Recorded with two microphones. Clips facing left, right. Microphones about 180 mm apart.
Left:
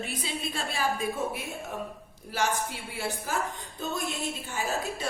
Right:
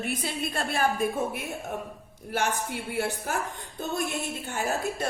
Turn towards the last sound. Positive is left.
turn(degrees=-55)  # may be behind; listen again after turning